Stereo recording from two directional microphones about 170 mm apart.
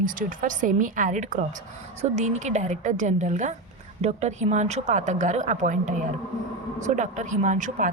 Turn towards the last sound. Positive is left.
turn(degrees=-45)  # may be behind; listen again after turning